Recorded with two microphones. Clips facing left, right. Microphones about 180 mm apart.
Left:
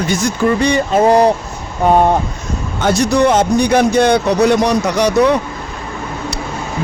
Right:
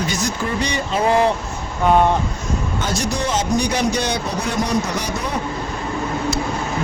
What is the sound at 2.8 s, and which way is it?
Speech, 65° left (ahead or behind).